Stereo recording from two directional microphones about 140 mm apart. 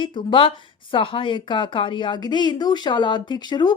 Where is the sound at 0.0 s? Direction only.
35° left (ahead or behind).